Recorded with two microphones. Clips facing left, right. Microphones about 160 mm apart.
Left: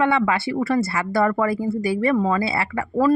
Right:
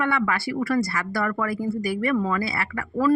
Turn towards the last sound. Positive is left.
turn(degrees=25)  # may be behind; listen again after turning